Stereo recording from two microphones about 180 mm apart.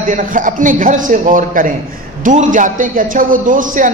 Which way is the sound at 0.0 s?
45° right (ahead or behind).